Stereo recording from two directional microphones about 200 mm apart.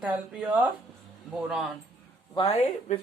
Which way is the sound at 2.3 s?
30° left (ahead or behind).